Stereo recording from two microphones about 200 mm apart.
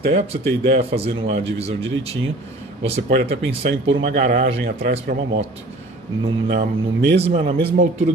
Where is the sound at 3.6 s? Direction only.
50° right (ahead or behind).